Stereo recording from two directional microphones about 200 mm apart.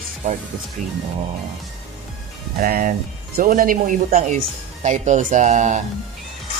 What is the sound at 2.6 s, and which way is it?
Speech, 45° right (ahead or behind).